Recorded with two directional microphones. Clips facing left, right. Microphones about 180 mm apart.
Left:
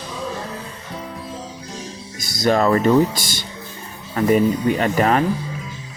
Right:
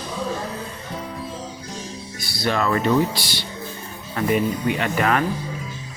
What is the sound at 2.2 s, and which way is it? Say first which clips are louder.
Speech: left 6 dB; 45° left (ahead or behind).